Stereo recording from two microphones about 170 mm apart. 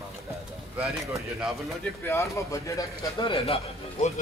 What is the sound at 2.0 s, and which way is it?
A man's voice, 15° left (ahead or behind).